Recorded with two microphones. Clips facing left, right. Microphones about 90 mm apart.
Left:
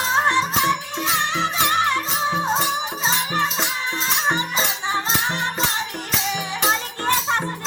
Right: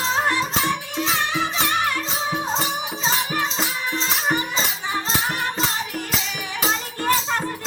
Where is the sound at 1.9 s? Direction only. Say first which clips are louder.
Left 3 dB; 25° left (ahead or behind).